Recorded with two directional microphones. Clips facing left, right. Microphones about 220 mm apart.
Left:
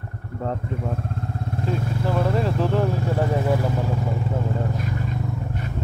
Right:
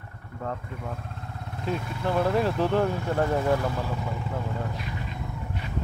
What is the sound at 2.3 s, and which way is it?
Vehicle, centre (ahead or behind).